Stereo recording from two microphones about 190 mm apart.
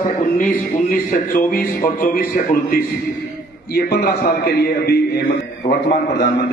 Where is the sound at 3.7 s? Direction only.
55° left (ahead or behind).